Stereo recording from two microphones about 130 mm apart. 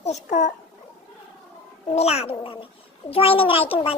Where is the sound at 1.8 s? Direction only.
55° left (ahead or behind).